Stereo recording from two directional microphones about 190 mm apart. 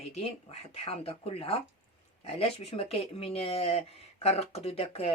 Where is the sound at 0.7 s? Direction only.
30° left (ahead or behind).